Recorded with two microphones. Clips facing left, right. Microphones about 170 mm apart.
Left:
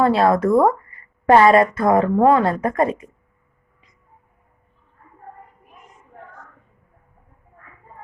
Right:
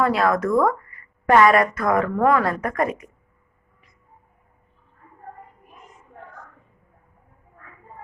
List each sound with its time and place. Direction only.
0.0 s a woman's voice: 30° left (ahead or behind)